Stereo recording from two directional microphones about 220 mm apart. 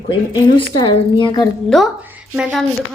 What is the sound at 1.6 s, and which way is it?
A woman's voice, centre (ahead or behind).